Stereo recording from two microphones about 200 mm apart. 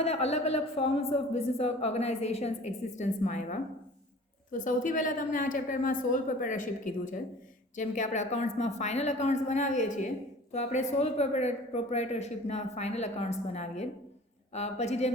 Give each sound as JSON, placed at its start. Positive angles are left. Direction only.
{"t": 0.0, "sound": "a woman's voice", "side_deg": 30}